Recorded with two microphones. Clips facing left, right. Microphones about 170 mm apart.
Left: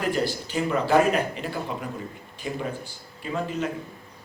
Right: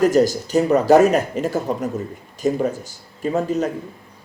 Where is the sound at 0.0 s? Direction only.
40° right (ahead or behind).